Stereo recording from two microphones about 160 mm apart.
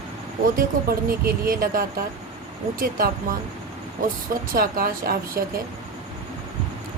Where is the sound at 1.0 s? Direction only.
65° right (ahead or behind).